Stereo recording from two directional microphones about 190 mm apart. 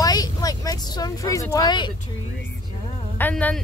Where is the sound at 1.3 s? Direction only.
20° left (ahead or behind).